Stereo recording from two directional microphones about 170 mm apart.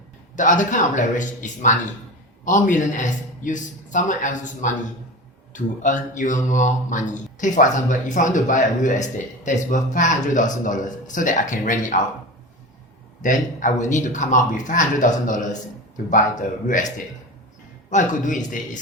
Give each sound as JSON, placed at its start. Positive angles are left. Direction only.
{"t": 0.3, "sound": "speech", "side_deg": 50}
{"t": 13.2, "sound": "speech", "side_deg": 50}
{"t": 16.6, "sound": "speech", "side_deg": 50}
{"t": 17.9, "sound": "speech", "side_deg": 50}